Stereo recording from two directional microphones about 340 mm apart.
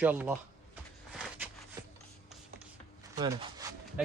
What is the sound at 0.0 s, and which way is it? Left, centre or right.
Speech, centre.